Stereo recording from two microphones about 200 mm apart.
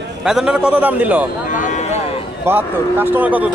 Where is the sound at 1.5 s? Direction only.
40° left (ahead or behind).